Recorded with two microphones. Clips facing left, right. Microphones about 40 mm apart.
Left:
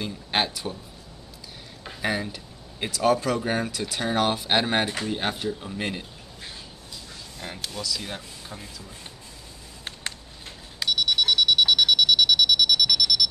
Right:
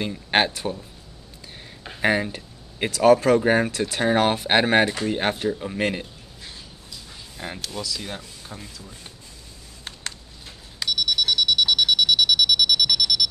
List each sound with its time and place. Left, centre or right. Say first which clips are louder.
0.0 s speech: right 5 dB; right
2.0 s speech: right 6 dB; right
7.3 s music: right 4 dB; centre
7.7 s speech: left 1 dB; centre
10.8 s a sound: left 1 dB; centre
11.1 s music: left 1 dB; centre